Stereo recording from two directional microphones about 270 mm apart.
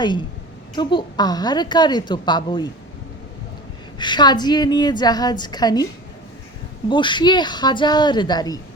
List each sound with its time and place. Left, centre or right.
0.8 s a woman's voice: centre
3.9 s a woman's voice: centre
6.9 s a woman's voice: centre